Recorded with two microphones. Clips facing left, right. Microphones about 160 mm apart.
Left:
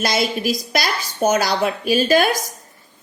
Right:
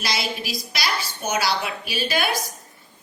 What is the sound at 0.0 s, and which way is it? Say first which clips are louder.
A woman's voice: left 8 dB; 50° left (ahead or behind).